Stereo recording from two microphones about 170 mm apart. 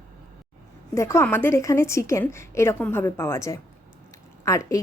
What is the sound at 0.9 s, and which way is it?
A woman's voice, 15° left (ahead or behind).